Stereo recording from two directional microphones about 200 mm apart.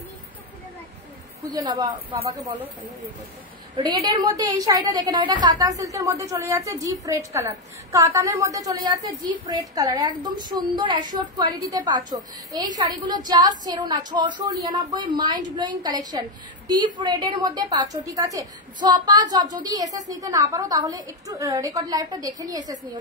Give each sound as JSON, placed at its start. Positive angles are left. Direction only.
{"t": 1.4, "sound": "a woman's voice", "side_deg": -20}